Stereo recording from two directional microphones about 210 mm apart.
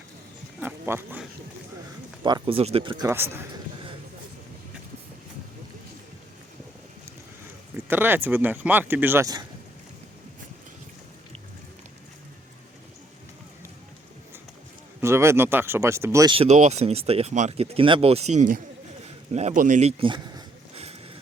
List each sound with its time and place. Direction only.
0.6 s a sound: 10° right (ahead or behind)
2.2 s speech: 25° right (ahead or behind)
2.9 s speech: 10° right (ahead or behind)
7.9 s speech: 10° right (ahead or behind)
15.0 s speech: 10° right (ahead or behind)
16.3 s a man's voice: 30° right (ahead or behind)
20.0 s a sound: 20° right (ahead or behind)